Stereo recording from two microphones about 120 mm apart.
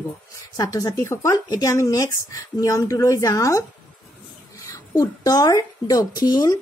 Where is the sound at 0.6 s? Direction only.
30° left (ahead or behind).